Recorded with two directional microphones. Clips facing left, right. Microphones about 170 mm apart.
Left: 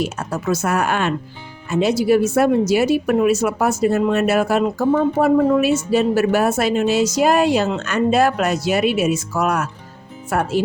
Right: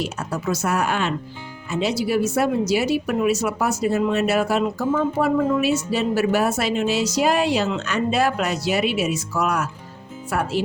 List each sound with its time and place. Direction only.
0.0 s speech: 50° left (ahead or behind)